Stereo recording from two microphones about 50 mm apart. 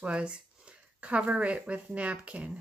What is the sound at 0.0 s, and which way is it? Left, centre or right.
Speech, right.